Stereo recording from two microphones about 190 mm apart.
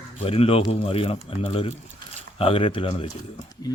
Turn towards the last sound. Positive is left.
turn(degrees=30)  # may be behind; listen again after turning